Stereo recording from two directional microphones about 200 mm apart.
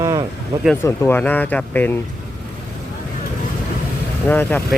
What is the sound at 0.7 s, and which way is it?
Speech, 10° left (ahead or behind).